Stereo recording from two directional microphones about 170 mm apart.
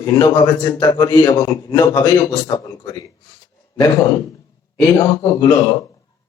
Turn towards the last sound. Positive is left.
turn(degrees=25)  # may be behind; listen again after turning